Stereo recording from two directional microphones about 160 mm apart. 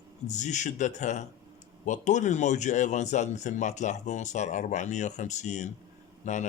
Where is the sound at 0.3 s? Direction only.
50° left (ahead or behind).